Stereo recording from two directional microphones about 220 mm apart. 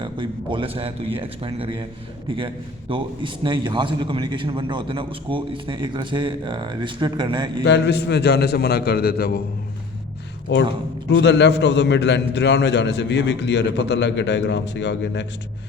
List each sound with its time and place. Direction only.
0.0 s a man's voice: 20° right (ahead or behind)
2.9 s a man's voice: 20° right (ahead or behind)
7.6 s a man's voice: 50° left (ahead or behind)
10.5 s a man's voice: 50° left (ahead or behind)